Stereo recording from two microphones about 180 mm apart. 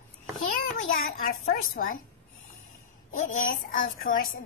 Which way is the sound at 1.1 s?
55° left (ahead or behind).